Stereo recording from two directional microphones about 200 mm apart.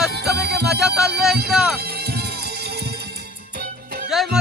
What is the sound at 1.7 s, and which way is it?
Music, 50° right (ahead or behind).